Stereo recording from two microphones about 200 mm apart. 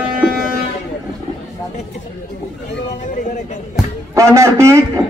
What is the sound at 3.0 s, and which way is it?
Speech, 40° left (ahead or behind).